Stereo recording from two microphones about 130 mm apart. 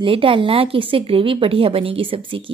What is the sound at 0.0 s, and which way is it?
Speech, 45° right (ahead or behind).